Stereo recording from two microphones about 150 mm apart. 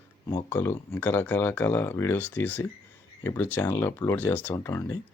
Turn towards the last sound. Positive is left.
turn(degrees=20)  # may be behind; listen again after turning